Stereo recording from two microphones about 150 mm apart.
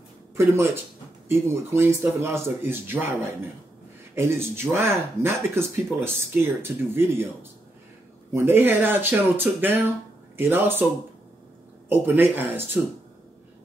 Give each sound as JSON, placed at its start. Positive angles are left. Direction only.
{"t": 1.3, "sound": "speech", "side_deg": -20}
{"t": 8.3, "sound": "speech", "side_deg": -15}
{"t": 11.9, "sound": "speech", "side_deg": -15}